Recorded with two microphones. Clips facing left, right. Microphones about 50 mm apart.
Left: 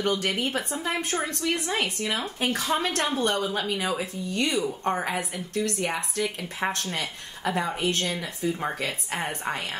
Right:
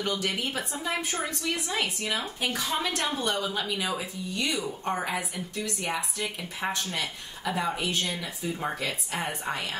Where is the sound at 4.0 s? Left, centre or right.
Left.